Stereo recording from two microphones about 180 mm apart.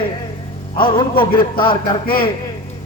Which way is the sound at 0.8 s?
30° left (ahead or behind).